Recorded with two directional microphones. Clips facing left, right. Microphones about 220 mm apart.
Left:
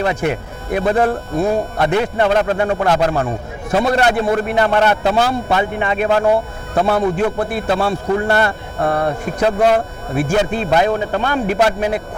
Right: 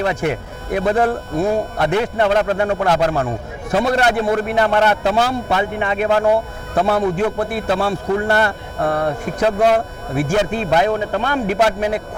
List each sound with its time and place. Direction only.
0.2 s speech: 15° left (ahead or behind)